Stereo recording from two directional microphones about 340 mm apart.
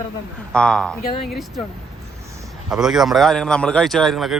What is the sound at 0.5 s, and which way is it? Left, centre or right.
Speech, centre.